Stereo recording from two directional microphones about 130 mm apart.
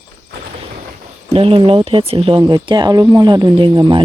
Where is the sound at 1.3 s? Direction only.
45° right (ahead or behind).